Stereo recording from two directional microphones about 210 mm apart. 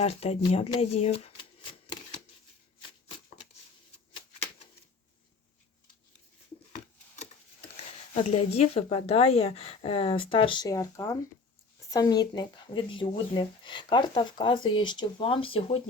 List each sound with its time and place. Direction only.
0.0 s speech: 30° left (ahead or behind)
7.9 s speech: 30° left (ahead or behind)